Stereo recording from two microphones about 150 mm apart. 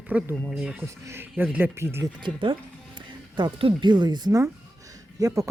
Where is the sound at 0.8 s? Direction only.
15° right (ahead or behind).